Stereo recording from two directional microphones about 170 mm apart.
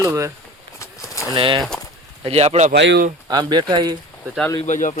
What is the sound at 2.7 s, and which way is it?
Speech, 80° right.